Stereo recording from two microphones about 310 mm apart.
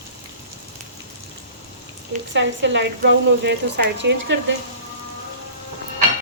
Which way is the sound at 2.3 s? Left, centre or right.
Right.